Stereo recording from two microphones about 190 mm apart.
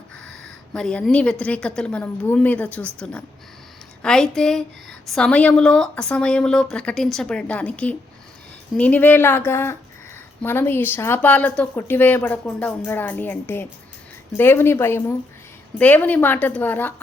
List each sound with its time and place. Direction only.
0.4 s a woman's voice: 5° left (ahead or behind)